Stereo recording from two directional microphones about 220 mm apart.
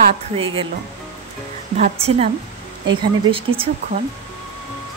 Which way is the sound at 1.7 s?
30° right (ahead or behind).